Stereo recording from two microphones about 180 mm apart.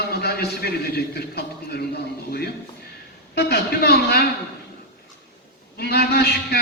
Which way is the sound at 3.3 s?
60° left (ahead or behind).